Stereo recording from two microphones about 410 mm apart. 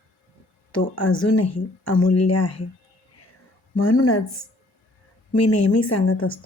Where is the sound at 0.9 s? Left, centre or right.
Left.